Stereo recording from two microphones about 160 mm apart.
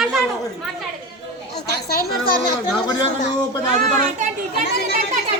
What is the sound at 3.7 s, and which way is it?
Speech, 50° right (ahead or behind).